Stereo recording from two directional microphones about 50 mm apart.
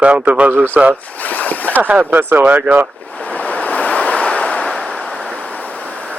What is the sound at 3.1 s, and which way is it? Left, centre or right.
Waves, left.